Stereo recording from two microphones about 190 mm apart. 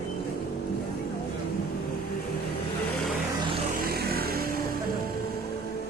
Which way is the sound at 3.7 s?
50° right (ahead or behind).